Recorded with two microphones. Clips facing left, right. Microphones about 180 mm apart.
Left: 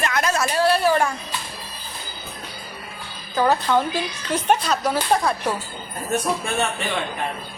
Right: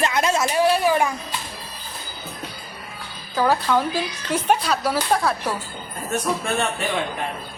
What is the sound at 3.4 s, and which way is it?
Speech, 10° left (ahead or behind).